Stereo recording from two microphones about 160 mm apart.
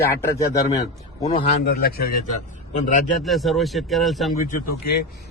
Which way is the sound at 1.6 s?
75° left (ahead or behind).